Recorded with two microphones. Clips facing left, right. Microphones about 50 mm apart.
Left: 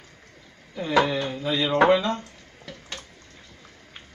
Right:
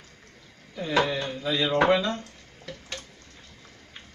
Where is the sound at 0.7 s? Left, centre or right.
Centre.